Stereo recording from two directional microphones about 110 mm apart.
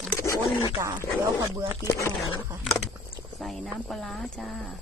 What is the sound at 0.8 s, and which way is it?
Speech, 25° right (ahead or behind).